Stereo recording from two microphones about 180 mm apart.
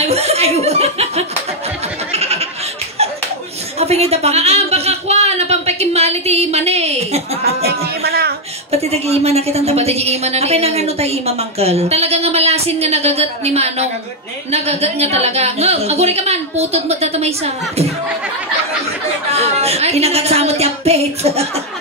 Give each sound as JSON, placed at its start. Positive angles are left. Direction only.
{"t": 0.0, "sound": "chuckle", "side_deg": -35}
{"t": 2.1, "sound": "goat", "side_deg": -35}
{"t": 3.8, "sound": "a sound", "side_deg": -35}
{"t": 7.4, "sound": "a sound", "side_deg": -60}
{"t": 8.7, "sound": "a woman's voice", "side_deg": -35}
{"t": 19.3, "sound": "a woman's voice", "side_deg": -35}